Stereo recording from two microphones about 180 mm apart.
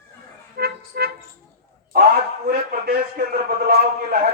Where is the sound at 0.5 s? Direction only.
60° right (ahead or behind).